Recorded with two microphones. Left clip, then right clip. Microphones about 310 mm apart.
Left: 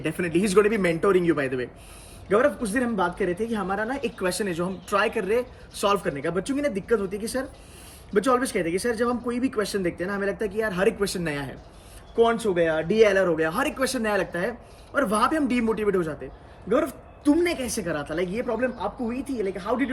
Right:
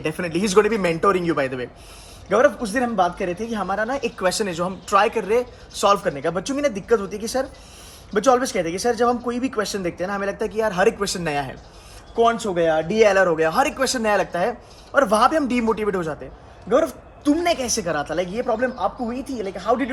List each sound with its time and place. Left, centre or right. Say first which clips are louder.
0.0 s speech: right 1 dB; centre